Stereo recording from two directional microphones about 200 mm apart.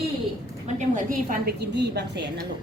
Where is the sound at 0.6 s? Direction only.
40° right (ahead or behind); by 2.4 s 60° right (ahead or behind).